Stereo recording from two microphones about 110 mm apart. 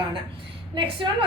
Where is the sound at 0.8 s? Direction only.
55° right (ahead or behind).